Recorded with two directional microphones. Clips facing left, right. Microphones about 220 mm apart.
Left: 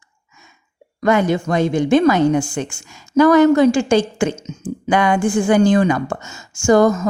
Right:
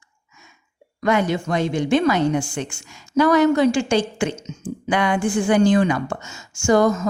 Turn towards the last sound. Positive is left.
turn(degrees=45)  # may be behind; listen again after turning